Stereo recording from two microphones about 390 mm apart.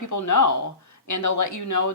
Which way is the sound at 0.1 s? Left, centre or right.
Left.